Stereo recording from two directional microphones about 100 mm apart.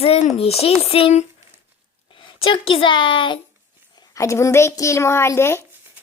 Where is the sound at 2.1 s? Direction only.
60° left (ahead or behind).